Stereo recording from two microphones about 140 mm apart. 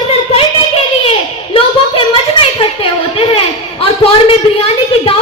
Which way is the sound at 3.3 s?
40° left (ahead or behind).